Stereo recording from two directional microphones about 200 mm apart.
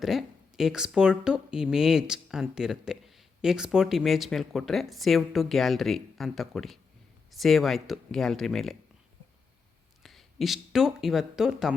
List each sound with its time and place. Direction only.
0.0 s speech: centre (ahead or behind)
10.0 s speech: centre (ahead or behind)